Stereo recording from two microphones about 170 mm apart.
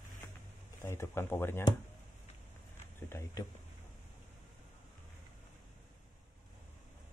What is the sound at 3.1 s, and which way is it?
Speech, 15° left (ahead or behind).